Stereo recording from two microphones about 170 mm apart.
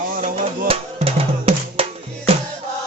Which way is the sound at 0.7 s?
35° right (ahead or behind).